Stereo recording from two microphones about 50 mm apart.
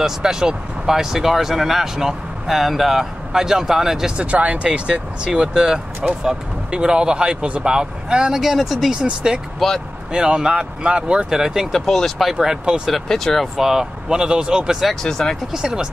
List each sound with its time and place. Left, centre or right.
0.0 s speech: centre
4.2 s speech: right; by 8.9 s centre
8.9 s speech: centre
9.6 s speech: centre
10.1 s speech: centre
11.7 s speech: centre
12.3 s speech: centre
13.1 s speech: centre
13.6 s speech: centre
15.0 s speech: centre
15.5 s speech: centre